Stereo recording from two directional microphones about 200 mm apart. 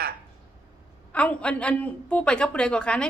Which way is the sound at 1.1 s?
5° left (ahead or behind).